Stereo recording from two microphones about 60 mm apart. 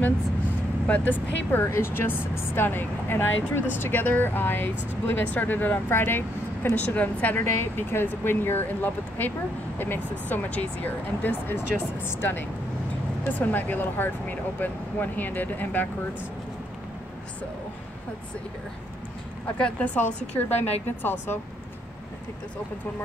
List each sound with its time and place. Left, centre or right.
0.8 s speech: left
1.6 s speech: left
7.4 s speech: left
19.6 s speech: left